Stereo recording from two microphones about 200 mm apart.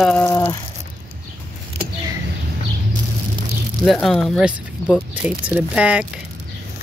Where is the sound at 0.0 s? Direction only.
5° left (ahead or behind).